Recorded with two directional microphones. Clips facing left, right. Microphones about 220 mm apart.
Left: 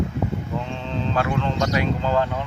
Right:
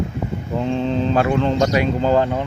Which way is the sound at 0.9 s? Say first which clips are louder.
Right 4 dB; 15° right (ahead or behind).